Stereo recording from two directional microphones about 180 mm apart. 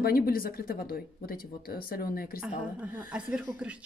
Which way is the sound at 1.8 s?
55° left (ahead or behind).